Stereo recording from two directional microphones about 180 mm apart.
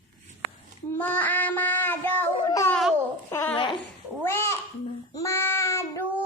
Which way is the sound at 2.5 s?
15° left (ahead or behind).